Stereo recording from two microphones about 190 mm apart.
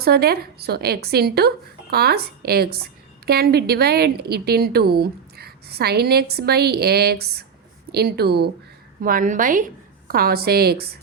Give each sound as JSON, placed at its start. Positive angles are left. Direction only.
{"t": 0.0, "sound": "a woman's voice", "side_deg": -55}
{"t": 9.0, "sound": "a woman's voice", "side_deg": -45}